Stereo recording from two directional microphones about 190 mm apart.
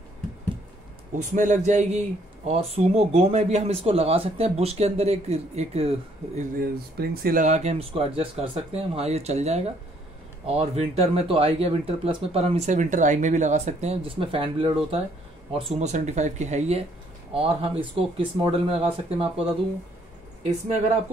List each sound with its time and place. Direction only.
1.3 s speech: 40° right (ahead or behind)
6.6 s speech: 50° right (ahead or behind); by 19.4 s 30° right (ahead or behind)